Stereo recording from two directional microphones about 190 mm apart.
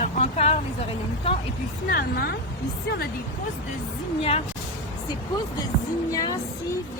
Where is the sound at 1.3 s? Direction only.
30° left (ahead or behind).